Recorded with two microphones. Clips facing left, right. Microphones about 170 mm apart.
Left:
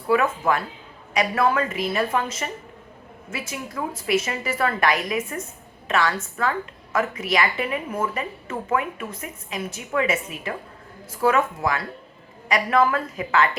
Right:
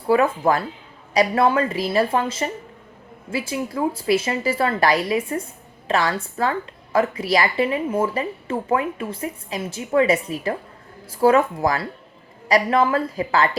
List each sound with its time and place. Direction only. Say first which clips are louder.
0.1 s a woman's voice: right 3 dB; 35° right (ahead or behind)